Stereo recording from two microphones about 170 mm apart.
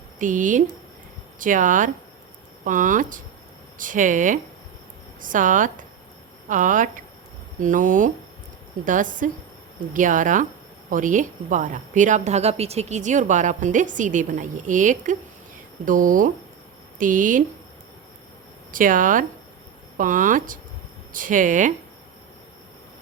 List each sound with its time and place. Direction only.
0.2 s speech: 50° right (ahead or behind)
18.7 s speech: 50° right (ahead or behind)